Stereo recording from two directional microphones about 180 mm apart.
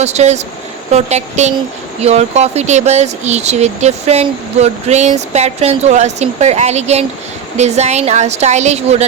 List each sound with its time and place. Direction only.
0.0 s speech: 40° right (ahead or behind)